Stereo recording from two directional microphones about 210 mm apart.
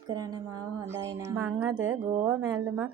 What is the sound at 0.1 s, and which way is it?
Music, 20° right (ahead or behind).